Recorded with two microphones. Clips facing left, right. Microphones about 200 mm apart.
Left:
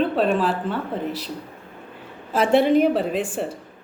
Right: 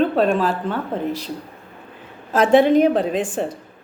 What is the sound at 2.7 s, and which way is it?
Speech, 5° left (ahead or behind).